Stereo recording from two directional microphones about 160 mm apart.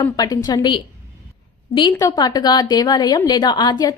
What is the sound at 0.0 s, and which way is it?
A woman's voice, 25° left (ahead or behind).